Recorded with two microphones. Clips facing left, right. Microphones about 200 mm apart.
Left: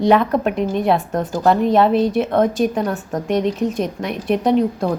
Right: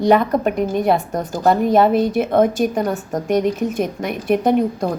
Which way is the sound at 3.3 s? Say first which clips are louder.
Right 1 dB; 45° right (ahead or behind).